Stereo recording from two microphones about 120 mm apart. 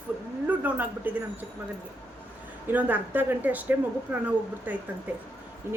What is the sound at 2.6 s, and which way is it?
A woman's voice, 15° right (ahead or behind).